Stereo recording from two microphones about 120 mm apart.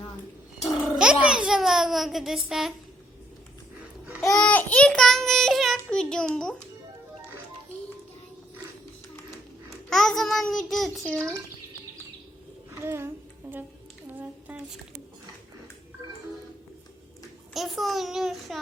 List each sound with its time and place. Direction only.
0.6 s a sound: 5° right (ahead or behind)
4.3 s speech: 5° left (ahead or behind)
4.9 s child singing: 5° left (ahead or behind)
9.6 s a child's voice: 5° left (ahead or behind)
12.8 s a child's voice: 20° right (ahead or behind)
14.1 s a sound: 15° right (ahead or behind)
17.5 s a child's voice: centre (ahead or behind)